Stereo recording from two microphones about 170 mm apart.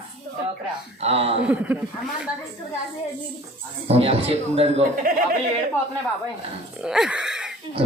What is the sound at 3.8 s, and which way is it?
Speech, 35° right (ahead or behind).